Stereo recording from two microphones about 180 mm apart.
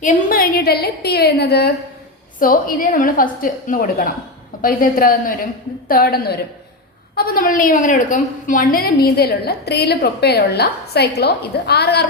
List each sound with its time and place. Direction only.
0.0 s a woman's voice: 50° left (ahead or behind); by 1.7 s 65° left (ahead or behind)
2.4 s a woman's voice: 50° left (ahead or behind)